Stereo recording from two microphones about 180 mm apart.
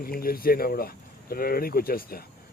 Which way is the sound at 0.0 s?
55° left (ahead or behind).